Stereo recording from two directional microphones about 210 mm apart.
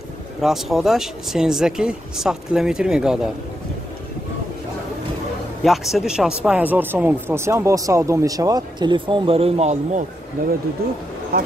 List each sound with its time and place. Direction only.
0.4 s speech: centre (ahead or behind)
5.6 s speech: centre (ahead or behind); by 10.0 s 30° right (ahead or behind)
10.4 s speech: 40° right (ahead or behind)